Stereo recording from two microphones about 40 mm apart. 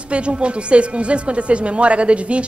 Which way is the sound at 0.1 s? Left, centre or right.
Right.